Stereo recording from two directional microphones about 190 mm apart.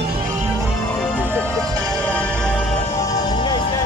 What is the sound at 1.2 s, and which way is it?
Music, 5° left (ahead or behind).